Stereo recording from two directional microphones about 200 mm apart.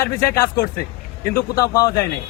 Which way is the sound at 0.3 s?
15° left (ahead or behind).